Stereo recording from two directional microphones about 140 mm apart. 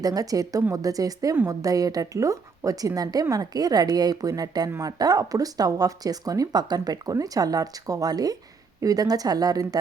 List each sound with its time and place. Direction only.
0.0 s speech: 25° right (ahead or behind)